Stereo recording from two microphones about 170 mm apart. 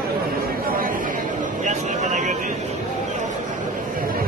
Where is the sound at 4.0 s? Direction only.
55° right (ahead or behind).